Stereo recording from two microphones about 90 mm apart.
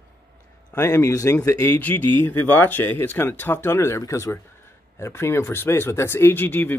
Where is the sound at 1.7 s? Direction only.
20° left (ahead or behind).